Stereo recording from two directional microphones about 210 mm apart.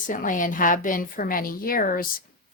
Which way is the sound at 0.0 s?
40° left (ahead or behind).